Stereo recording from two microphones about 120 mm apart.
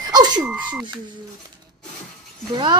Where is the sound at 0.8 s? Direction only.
40° right (ahead or behind).